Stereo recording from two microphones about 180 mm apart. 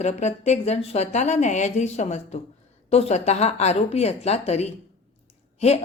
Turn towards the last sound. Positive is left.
turn(degrees=35)  # may be behind; listen again after turning